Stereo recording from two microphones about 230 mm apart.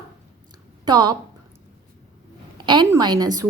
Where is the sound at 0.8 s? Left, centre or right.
Centre.